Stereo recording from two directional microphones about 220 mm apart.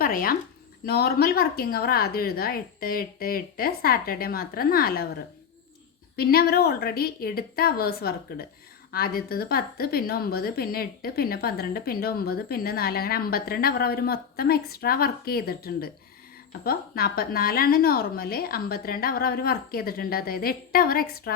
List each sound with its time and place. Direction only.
0.0 s a woman's voice: 40° left (ahead or behind)
6.1 s a woman's voice: 45° left (ahead or behind)